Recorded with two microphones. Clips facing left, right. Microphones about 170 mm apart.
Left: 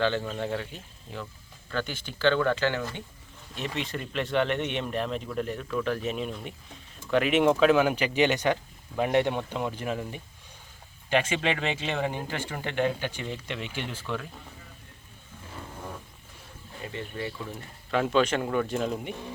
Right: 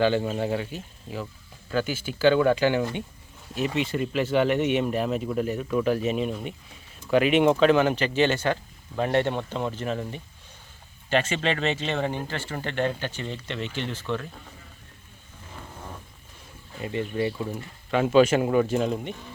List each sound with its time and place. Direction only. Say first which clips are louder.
0.3 s speech: right 4 dB; 10° right (ahead or behind)
3.5 s speech: right 7 dB; 5° right (ahead or behind)
16.8 s speech: right 8 dB; 20° right (ahead or behind)
17.9 s speech: right 5 dB; 5° right (ahead or behind)